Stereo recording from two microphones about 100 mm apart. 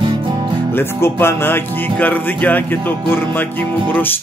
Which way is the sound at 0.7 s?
25° left (ahead or behind).